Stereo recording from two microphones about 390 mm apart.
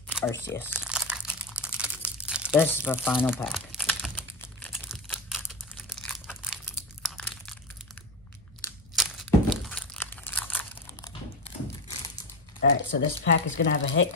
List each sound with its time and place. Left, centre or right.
0.1 s crumpling: centre
6.0 s crunch: centre
8.9 s crumpling: centre
12.5 s speech: left